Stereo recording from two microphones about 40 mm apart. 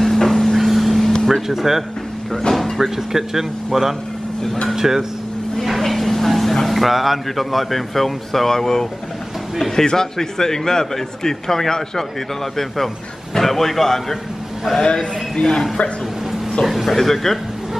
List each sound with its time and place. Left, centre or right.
0.0 s vehicle: centre
0.6 s vehicle: centre
1.0 s air conditioning: centre
1.3 s music: centre
2.5 s a sound: centre
3.1 s speech: centre
5.6 s a man's voice: centre
15.3 s speech: left
16.6 s a man's voice: centre